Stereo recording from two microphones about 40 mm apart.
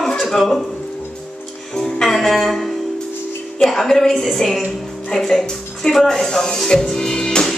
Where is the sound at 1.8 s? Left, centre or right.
Centre.